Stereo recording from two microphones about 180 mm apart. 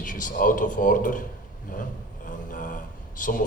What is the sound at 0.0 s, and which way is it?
A man's voice, 45° left (ahead or behind).